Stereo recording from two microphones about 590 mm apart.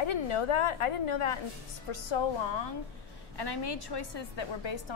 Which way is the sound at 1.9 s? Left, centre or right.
Left.